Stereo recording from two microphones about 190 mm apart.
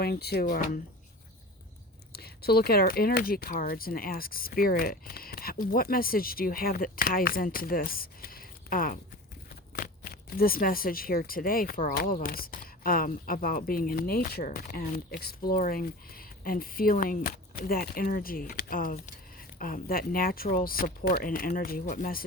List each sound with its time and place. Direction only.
0.0 s speech: 55° left (ahead or behind)
2.1 s speech: 55° left (ahead or behind)